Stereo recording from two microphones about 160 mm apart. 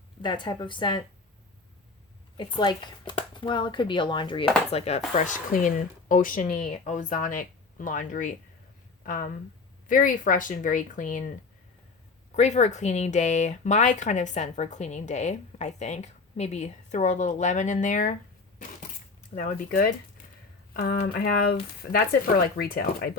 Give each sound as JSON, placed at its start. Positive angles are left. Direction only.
{"t": 0.2, "sound": "speech", "side_deg": 30}
{"t": 2.4, "sound": "speech", "side_deg": 30}
{"t": 4.7, "sound": "speech", "side_deg": 45}
{"t": 9.9, "sound": "speech", "side_deg": 60}
{"t": 12.4, "sound": "speech", "side_deg": 45}
{"t": 19.3, "sound": "speech", "side_deg": 60}
{"t": 20.7, "sound": "speech", "side_deg": 75}